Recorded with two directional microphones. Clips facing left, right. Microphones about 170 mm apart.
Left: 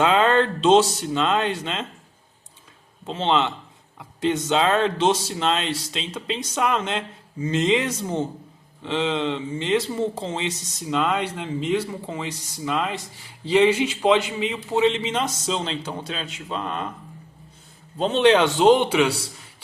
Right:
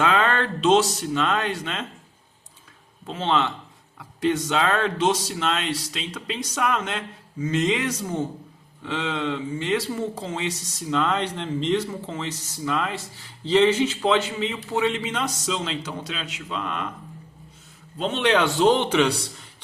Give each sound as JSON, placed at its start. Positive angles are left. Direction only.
{"t": 0.0, "sound": "speech", "side_deg": 25}
{"t": 3.1, "sound": "speech", "side_deg": 25}
{"t": 10.9, "sound": "speech", "side_deg": 15}
{"t": 17.9, "sound": "speech", "side_deg": 35}